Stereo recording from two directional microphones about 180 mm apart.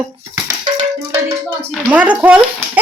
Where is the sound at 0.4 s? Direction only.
20° right (ahead or behind).